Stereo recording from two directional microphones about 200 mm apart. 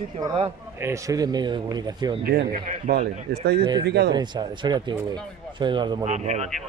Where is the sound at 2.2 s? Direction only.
50° right (ahead or behind).